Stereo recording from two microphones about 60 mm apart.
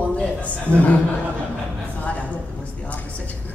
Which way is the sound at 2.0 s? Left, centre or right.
Left.